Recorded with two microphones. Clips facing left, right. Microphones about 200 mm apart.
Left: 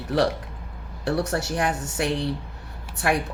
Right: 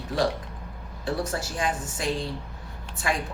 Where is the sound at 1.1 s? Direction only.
70° left (ahead or behind).